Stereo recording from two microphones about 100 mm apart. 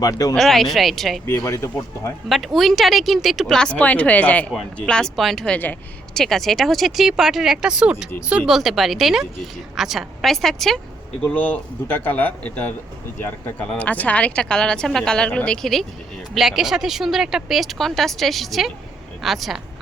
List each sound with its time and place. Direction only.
0.0 s speech: 35° left (ahead or behind)
0.3 s speech: centre (ahead or behind)
1.3 s speech: 30° left (ahead or behind)
2.3 s speech: centre (ahead or behind)
11.2 s speech: 15° left (ahead or behind)
15.6 s speech: centre (ahead or behind)